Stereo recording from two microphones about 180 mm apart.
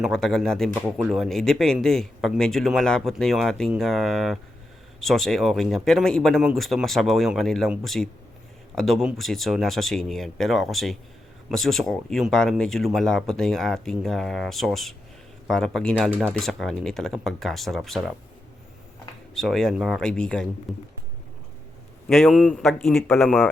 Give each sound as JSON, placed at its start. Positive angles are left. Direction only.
{"t": 0.0, "sound": "speech", "side_deg": 0}
{"t": 16.0, "sound": "speech", "side_deg": -10}
{"t": 16.4, "sound": "speech", "side_deg": 0}
{"t": 19.3, "sound": "speech", "side_deg": 0}
{"t": 22.1, "sound": "speech", "side_deg": 0}